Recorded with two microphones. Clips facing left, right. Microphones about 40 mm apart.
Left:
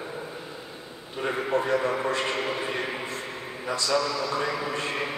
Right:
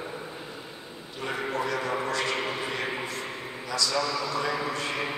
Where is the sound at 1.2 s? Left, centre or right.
Left.